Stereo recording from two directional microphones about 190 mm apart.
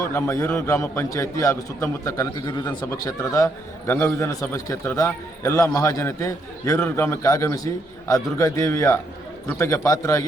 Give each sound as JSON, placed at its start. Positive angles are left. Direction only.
{"t": 0.1, "sound": "a man's voice", "side_deg": 15}